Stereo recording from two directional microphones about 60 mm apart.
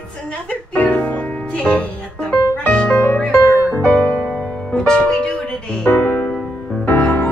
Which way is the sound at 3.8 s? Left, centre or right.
Left.